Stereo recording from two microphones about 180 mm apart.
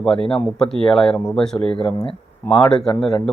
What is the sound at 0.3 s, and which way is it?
Speech, 5° left (ahead or behind).